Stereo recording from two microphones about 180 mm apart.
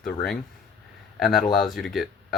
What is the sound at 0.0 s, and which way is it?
Speech, 5° left (ahead or behind).